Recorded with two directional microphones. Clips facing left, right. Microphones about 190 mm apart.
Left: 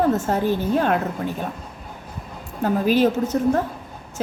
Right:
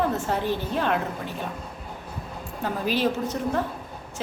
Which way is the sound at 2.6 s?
45° left (ahead or behind).